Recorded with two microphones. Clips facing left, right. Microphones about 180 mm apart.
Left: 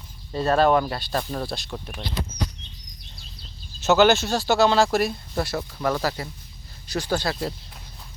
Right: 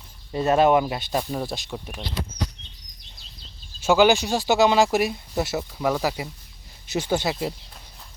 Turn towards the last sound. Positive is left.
turn(degrees=-15)  # may be behind; listen again after turning